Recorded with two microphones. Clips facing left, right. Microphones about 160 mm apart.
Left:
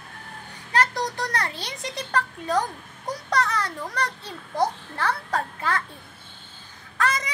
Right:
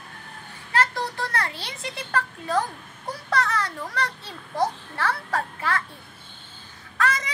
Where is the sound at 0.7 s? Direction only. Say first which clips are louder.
Left 1 dB; 15° left (ahead or behind).